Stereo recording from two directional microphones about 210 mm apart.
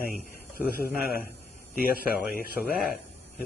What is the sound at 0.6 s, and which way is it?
Speech, 45° left (ahead or behind).